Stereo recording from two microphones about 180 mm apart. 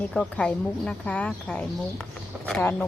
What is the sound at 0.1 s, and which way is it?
A woman's voice, 5° left (ahead or behind).